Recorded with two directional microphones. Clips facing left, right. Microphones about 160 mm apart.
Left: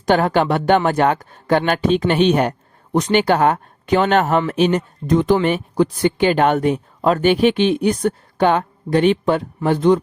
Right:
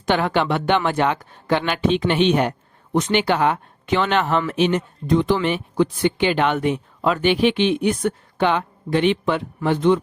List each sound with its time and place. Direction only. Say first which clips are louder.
0.0 s speech: left 4 dB; 40° left (ahead or behind)